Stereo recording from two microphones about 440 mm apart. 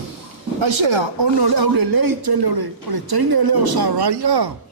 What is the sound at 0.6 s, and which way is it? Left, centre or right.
Speech, right.